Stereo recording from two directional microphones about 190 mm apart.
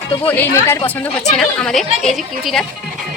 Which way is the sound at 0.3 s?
15° left (ahead or behind).